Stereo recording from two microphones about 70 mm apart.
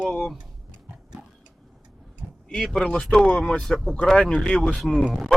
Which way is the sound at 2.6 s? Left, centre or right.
Centre.